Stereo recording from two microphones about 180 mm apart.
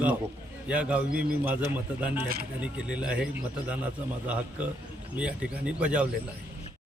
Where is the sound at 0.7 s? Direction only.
5° right (ahead or behind).